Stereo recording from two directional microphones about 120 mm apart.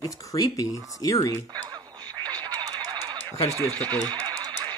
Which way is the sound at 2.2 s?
35° right (ahead or behind).